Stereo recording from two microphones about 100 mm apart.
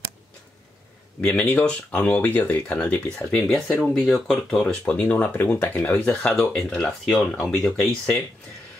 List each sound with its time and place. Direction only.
1.2 s speech: 10° left (ahead or behind)
4.8 s speech: 15° left (ahead or behind)